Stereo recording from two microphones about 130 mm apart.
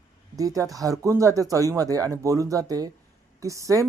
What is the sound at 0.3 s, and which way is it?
Speech, 25° right (ahead or behind).